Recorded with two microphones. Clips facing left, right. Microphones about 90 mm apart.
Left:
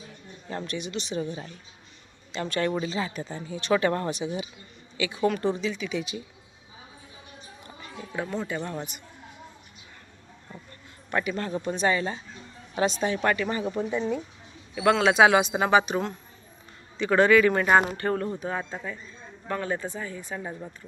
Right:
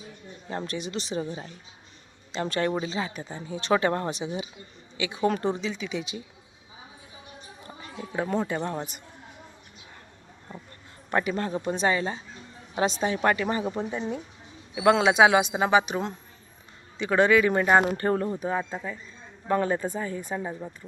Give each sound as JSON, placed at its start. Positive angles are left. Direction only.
{"t": 0.6, "sound": "speech", "side_deg": -30}
{"t": 8.4, "sound": "speech", "side_deg": -30}
{"t": 11.1, "sound": "speech", "side_deg": -30}
{"t": 15.9, "sound": "speech", "side_deg": -20}
{"t": 18.3, "sound": "speech", "side_deg": -10}
{"t": 19.5, "sound": "speech", "side_deg": -25}
{"t": 20.4, "sound": "speech", "side_deg": -5}